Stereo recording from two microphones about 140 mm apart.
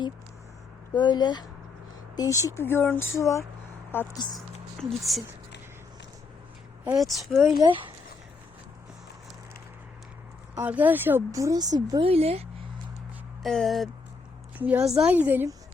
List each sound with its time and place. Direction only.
0.9 s speech: 30° left (ahead or behind)
4.4 s speech: centre (ahead or behind)
7.0 s speech: centre (ahead or behind)
7.5 s speech: 35° right (ahead or behind)
10.6 s speech: 10° right (ahead or behind); by 12.0 s 30° right (ahead or behind)
12.0 s speech: 45° right (ahead or behind)
13.4 s speech: centre (ahead or behind)
14.6 s a woman's voice: 10° right (ahead or behind)